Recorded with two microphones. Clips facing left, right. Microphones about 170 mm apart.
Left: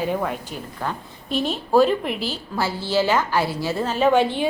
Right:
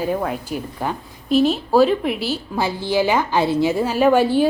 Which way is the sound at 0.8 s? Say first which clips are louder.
Right 3 dB; 10° right (ahead or behind).